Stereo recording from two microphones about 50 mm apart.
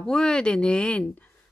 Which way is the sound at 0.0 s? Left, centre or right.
Centre.